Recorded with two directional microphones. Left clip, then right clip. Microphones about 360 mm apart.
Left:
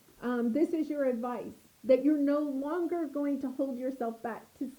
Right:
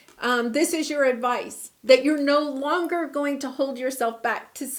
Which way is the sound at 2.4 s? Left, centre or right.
Centre.